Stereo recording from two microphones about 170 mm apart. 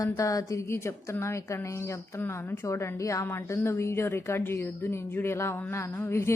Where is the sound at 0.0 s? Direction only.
20° left (ahead or behind).